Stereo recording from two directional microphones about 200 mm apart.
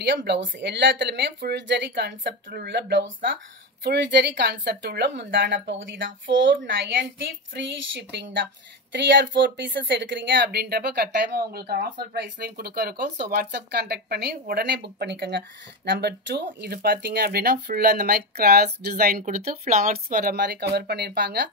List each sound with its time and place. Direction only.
0.0 s a woman's voice: 60° right (ahead or behind)